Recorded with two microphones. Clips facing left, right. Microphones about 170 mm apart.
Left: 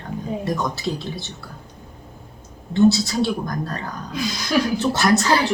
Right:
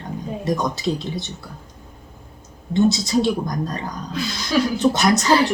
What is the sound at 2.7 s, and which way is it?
A woman's voice, 20° right (ahead or behind).